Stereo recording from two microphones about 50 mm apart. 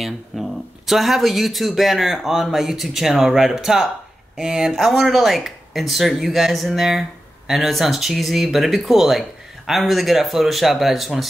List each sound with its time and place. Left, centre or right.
0.0 s speech: centre